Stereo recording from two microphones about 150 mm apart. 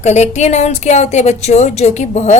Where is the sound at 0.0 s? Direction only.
50° left (ahead or behind).